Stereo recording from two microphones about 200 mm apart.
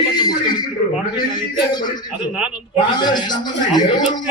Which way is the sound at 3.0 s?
20° left (ahead or behind).